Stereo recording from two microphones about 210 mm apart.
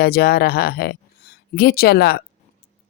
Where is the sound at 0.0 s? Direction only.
50° left (ahead or behind).